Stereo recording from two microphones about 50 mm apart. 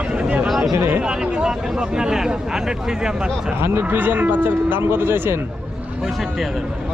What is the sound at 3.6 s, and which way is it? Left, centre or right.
Speech, right.